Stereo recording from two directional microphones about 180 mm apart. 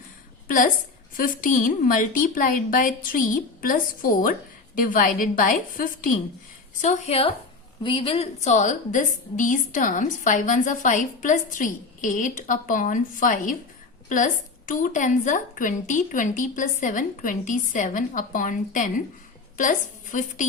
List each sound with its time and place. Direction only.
0.4 s a sound: 50° left (ahead or behind)
1.1 s a woman's voice: 50° left (ahead or behind)
6.8 s a woman's voice: 35° left (ahead or behind)
14.7 s a woman's voice: 45° left (ahead or behind)